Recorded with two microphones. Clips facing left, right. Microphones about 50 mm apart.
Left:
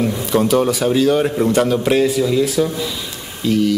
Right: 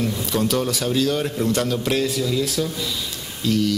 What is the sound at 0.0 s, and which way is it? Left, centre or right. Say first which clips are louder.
Speech: left 6 dB; centre.